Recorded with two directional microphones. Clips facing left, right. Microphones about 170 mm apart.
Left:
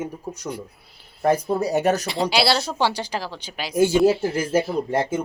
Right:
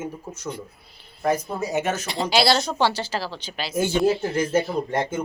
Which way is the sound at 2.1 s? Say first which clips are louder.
Even; centre (ahead or behind).